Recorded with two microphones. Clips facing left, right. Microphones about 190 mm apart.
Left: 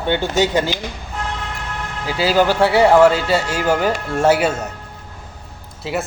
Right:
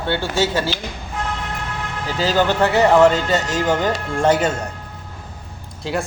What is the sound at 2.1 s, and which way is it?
A man's voice, 10° left (ahead or behind).